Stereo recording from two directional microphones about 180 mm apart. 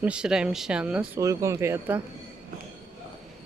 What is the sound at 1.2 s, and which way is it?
Speech, 15° right (ahead or behind).